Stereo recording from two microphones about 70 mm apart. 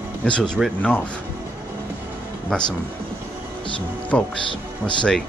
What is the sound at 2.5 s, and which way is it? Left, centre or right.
Speech, centre.